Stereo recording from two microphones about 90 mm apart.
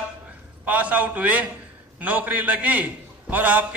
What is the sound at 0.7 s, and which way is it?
A man's voice, 15° right (ahead or behind).